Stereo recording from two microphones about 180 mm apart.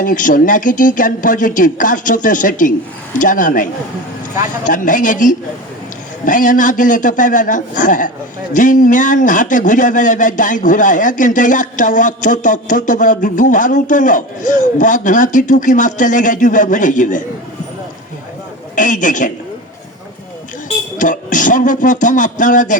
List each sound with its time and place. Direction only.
0.0 s speech: 50° left (ahead or behind)
18.8 s speech: 45° left (ahead or behind)
21.0 s speech: 45° left (ahead or behind)